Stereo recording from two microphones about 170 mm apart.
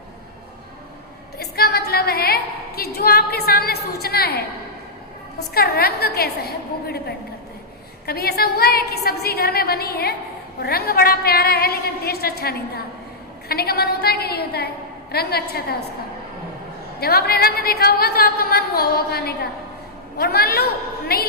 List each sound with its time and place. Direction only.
1.4 s a woman's voice: 70° left (ahead or behind)
8.0 s a woman's voice: 65° left (ahead or behind)
17.0 s a woman's voice: 65° left (ahead or behind)